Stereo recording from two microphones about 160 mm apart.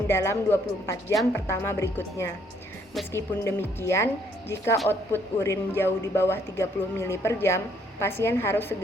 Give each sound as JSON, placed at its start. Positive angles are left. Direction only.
{"t": 0.1, "sound": "speech", "side_deg": 15}